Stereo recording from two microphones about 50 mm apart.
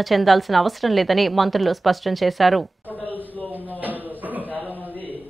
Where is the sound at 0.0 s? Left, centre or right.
Centre.